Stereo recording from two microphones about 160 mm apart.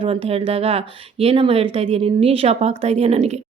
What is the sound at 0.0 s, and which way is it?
Speech, 35° right (ahead or behind).